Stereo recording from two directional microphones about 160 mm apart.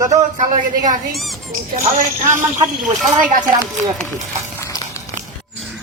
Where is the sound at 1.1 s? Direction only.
Centre (ahead or behind).